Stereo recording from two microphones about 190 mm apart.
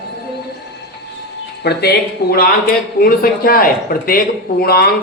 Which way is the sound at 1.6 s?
60° left (ahead or behind).